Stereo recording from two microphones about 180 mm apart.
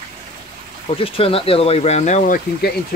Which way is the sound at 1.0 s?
30° left (ahead or behind).